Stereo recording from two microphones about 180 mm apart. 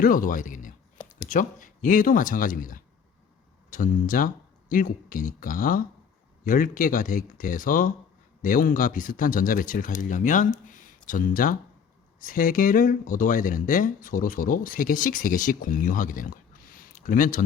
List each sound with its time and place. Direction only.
0.0 s speech: 50° left (ahead or behind)
10.7 s a sound: 45° left (ahead or behind)
12.2 s speech: 50° left (ahead or behind)